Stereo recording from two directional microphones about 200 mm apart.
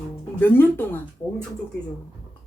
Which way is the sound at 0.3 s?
10° left (ahead or behind).